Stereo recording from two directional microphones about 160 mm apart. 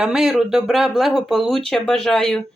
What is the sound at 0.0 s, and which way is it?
Speech, 5° right (ahead or behind).